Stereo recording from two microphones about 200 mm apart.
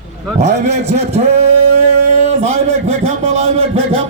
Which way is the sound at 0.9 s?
35° right (ahead or behind).